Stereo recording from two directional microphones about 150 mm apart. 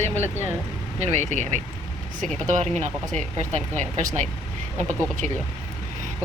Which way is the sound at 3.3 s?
50° right (ahead or behind).